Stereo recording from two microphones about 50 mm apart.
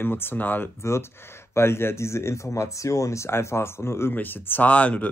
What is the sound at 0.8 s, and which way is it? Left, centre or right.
Speech, left.